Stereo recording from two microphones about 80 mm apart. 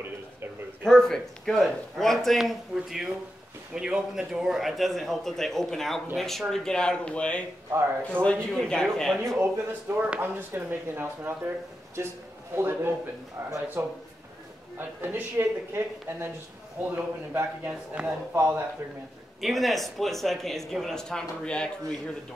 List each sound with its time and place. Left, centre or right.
0.8 s speech: centre
9.4 s speech: right
10.0 s speech: centre
10.5 s a man's voice: right
18.0 s speech: centre
18.3 s a man's voice: right
19.4 s speech: centre